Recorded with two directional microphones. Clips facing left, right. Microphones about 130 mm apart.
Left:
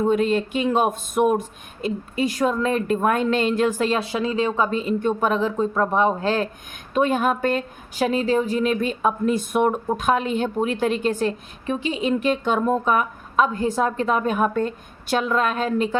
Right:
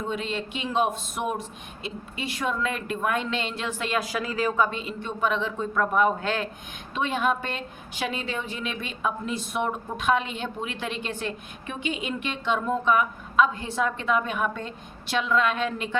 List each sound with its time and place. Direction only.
0.0 s a woman's voice: 45° left (ahead or behind)